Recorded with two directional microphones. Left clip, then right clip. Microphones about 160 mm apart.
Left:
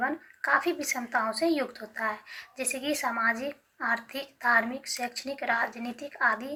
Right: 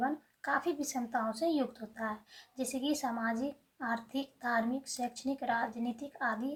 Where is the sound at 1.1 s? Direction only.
25° right (ahead or behind).